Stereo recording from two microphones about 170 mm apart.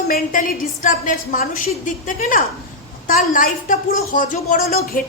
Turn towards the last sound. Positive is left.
turn(degrees=55)  # may be behind; listen again after turning